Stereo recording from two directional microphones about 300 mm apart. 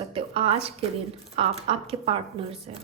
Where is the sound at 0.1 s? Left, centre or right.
Centre.